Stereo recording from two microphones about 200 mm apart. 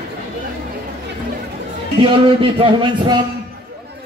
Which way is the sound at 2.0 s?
25° right (ahead or behind).